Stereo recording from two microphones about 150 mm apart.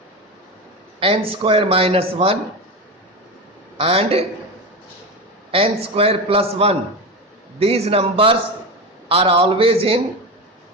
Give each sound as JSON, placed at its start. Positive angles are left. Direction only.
{"t": 0.9, "sound": "a man's voice", "side_deg": -40}
{"t": 3.8, "sound": "a man's voice", "side_deg": -40}
{"t": 5.5, "sound": "a man's voice", "side_deg": -40}